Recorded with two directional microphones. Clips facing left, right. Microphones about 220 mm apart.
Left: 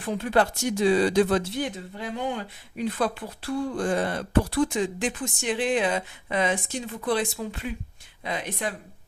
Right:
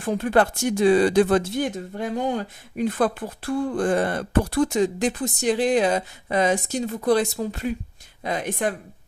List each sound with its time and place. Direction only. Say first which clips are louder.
0.0 s speech: right 3 dB; 50° right (ahead or behind)